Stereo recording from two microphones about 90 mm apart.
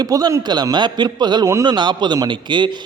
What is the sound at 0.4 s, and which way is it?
A man's voice, 50° right (ahead or behind).